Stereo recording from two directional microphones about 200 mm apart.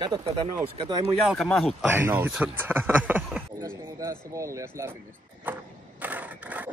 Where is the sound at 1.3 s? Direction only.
Centre (ahead or behind).